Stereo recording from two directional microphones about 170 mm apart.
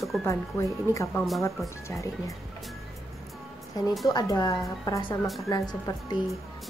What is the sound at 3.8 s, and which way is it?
A woman's voice, 20° left (ahead or behind).